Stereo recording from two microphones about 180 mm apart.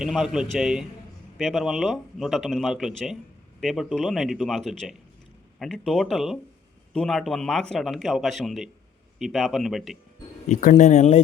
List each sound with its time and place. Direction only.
0.0 s speech: 5° right (ahead or behind)
10.5 s speech: 45° left (ahead or behind)